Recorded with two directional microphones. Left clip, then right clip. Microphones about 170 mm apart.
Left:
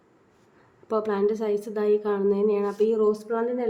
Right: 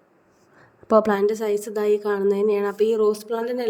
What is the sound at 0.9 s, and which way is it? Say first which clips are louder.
A woman's voice: right 6 dB; 35° right (ahead or behind).